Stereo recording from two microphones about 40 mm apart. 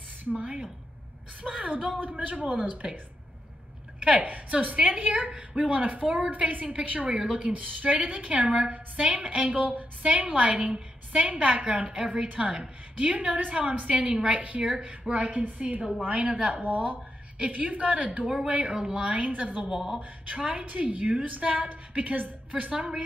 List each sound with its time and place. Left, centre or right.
0.2 s speech: right
1.5 s a woman's voice: right
2.8 s speech: centre
4.0 s a woman's voice: right
19.7 s speech: centre
20.0 s a woman's voice: right
22.7 s a woman's voice: right